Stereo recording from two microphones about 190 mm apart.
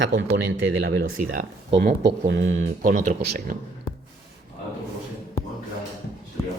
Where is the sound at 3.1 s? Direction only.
60° right (ahead or behind).